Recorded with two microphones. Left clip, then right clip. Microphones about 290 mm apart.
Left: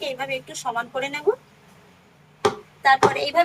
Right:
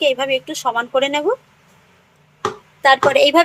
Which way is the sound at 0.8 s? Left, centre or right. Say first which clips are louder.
Right 10 dB; right.